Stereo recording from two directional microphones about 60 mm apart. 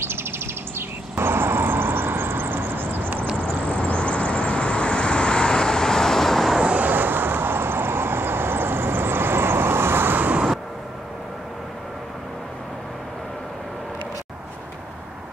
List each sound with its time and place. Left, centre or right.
0.0 s bird: right
0.7 s vehicle: right
3.4 s vehicle: left
6.6 s vehicle: right